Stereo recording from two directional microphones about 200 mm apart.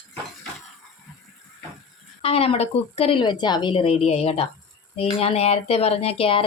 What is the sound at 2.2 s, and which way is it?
A woman's voice, 30° left (ahead or behind).